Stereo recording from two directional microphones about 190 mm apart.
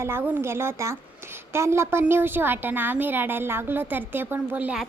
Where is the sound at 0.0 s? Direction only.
10° right (ahead or behind).